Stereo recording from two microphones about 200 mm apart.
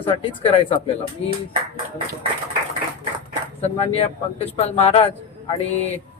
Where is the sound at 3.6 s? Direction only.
30° left (ahead or behind).